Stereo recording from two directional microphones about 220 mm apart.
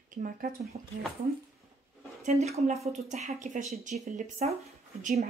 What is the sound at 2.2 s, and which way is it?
Speech, 30° right (ahead or behind).